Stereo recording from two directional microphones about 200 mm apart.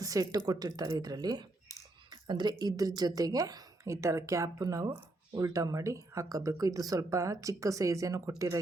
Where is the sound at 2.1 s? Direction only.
20° right (ahead or behind).